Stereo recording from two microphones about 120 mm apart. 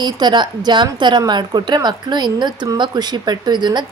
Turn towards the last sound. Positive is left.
turn(degrees=-35)  # may be behind; listen again after turning